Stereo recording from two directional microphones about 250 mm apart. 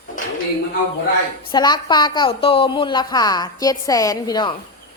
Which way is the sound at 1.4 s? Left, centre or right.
Centre.